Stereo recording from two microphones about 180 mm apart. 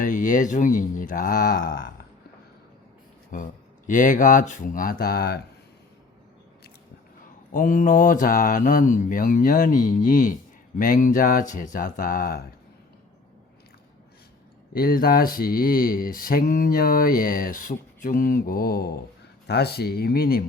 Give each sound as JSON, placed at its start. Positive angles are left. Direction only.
{"t": 0.0, "sound": "speech", "side_deg": 45}
{"t": 3.3, "sound": "speech", "side_deg": 45}
{"t": 7.5, "sound": "speech", "side_deg": 50}
{"t": 14.7, "sound": "speech", "side_deg": 55}